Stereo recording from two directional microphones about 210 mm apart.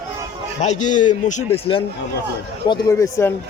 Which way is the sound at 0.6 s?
35° left (ahead or behind).